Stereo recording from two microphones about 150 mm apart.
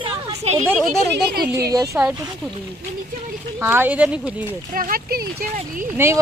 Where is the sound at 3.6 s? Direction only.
15° right (ahead or behind).